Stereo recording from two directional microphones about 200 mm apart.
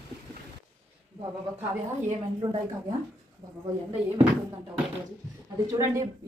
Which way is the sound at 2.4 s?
25° right (ahead or behind).